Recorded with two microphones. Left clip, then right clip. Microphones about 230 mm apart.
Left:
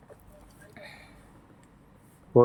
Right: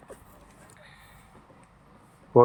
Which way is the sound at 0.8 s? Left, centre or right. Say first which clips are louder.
Left 8 dB; left.